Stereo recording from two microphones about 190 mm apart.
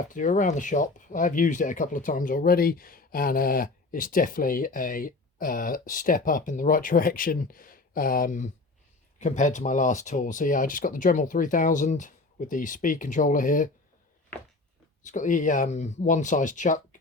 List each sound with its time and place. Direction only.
0.0 s speech: 45° left (ahead or behind)
15.0 s speech: 40° left (ahead or behind)